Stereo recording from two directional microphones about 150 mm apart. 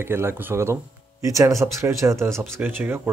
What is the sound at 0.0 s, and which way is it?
Speech, 15° right (ahead or behind).